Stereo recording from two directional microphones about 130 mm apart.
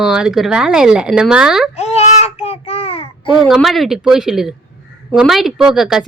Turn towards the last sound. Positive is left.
turn(degrees=0)  # may be behind; listen again after turning